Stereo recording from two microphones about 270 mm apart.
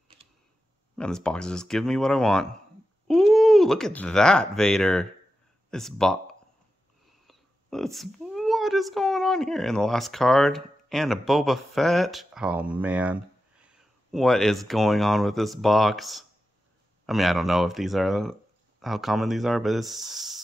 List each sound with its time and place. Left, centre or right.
0.2 s a sound: right
0.9 s speech: centre
7.2 s speech: centre